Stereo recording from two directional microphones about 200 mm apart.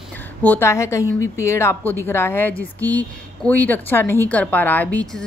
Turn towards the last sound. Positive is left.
turn(degrees=5)  # may be behind; listen again after turning